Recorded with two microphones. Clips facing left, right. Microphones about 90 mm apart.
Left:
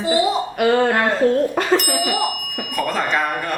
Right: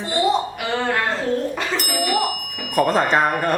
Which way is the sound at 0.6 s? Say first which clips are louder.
Left 8 dB; 45° left (ahead or behind).